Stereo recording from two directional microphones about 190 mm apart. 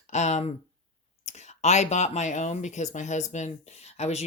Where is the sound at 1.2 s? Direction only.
35° left (ahead or behind).